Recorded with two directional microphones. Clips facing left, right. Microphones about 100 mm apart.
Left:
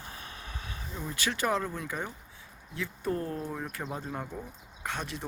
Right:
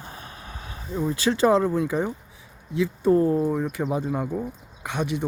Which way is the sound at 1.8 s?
20° right (ahead or behind).